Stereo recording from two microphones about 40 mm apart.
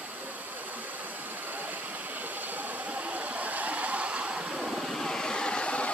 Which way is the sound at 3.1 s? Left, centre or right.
Right.